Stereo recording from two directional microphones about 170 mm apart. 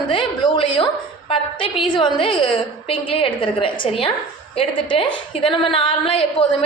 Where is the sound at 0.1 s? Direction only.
30° left (ahead or behind).